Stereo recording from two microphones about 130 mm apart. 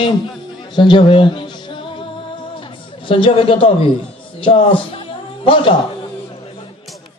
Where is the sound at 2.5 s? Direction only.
40° left (ahead or behind).